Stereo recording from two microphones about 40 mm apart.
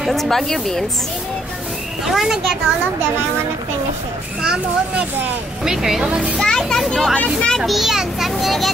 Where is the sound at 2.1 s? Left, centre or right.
Centre.